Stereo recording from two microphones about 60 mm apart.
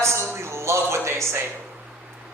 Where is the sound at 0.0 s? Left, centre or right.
Right.